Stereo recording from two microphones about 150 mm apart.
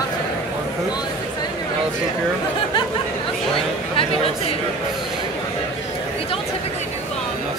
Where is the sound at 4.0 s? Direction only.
40° left (ahead or behind).